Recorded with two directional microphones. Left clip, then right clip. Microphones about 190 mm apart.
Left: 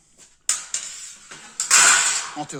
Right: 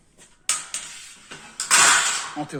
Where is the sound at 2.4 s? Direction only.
20° left (ahead or behind).